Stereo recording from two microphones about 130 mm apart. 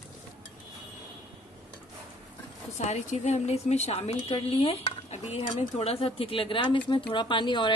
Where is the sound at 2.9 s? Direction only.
60° left (ahead or behind).